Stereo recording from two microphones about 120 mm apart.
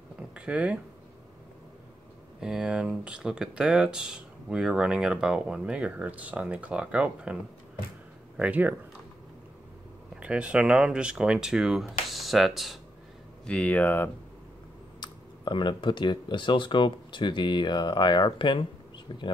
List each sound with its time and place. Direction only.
0.3 s speech: 10° right (ahead or behind)
2.4 s speech: 5° right (ahead or behind)
8.4 s speech: 15° right (ahead or behind)
10.2 s speech: 10° right (ahead or behind)
13.5 s speech: 10° left (ahead or behind)
15.0 s speech: 40° left (ahead or behind)